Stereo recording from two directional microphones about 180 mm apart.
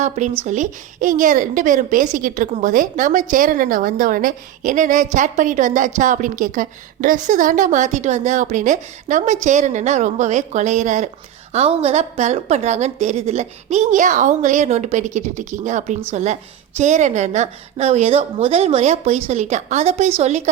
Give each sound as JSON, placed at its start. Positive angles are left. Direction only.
{"t": 0.4, "sound": "a woman's voice", "side_deg": -45}